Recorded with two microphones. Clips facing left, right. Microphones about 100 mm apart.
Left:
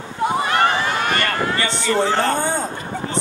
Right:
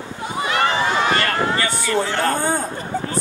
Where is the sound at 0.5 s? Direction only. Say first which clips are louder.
Left 1 dB; 50° left (ahead or behind).